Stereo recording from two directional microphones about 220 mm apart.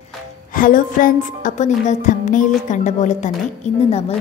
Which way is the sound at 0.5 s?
40° left (ahead or behind).